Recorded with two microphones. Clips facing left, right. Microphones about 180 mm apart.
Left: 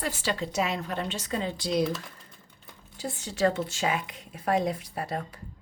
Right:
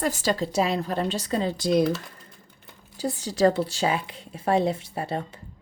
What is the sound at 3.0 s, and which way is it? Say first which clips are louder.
A woman's voice: right 5 dB; 35° right (ahead or behind).